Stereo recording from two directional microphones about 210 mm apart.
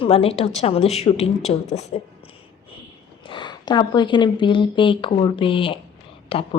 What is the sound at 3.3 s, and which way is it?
A woman's voice, 20° left (ahead or behind).